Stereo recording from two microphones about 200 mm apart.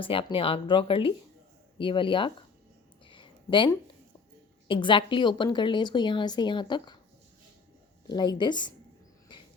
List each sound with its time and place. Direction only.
0.0 s a woman's voice: 25° left (ahead or behind)
3.1 s a sound: 25° left (ahead or behind)
4.7 s a woman's voice: 25° left (ahead or behind)
8.0 s a woman's voice: 20° left (ahead or behind)